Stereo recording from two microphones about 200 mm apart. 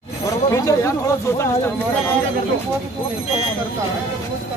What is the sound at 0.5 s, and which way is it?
Speech, 15° left (ahead or behind).